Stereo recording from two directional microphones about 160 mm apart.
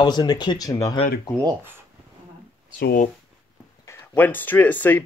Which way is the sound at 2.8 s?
65° left (ahead or behind).